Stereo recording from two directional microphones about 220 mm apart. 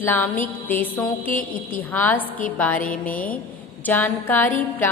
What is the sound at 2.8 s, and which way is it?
Music, 40° left (ahead or behind).